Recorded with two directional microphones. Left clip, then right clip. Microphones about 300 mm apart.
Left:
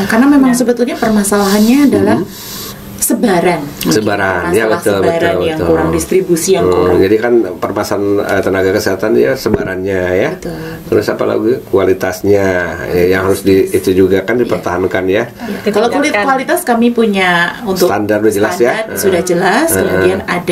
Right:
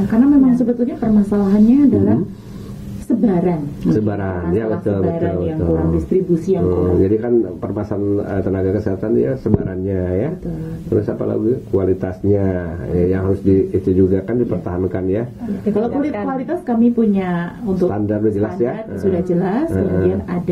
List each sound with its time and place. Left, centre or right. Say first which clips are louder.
0.0 s speech: left 5 dB; centre
1.1 s speech: left 6 dB; centre
1.7 s speech: left 3 dB; centre
12.4 s speech: left 9 dB; centre
17.6 s speech: left 7 dB; centre
17.9 s speech: left 7 dB; centre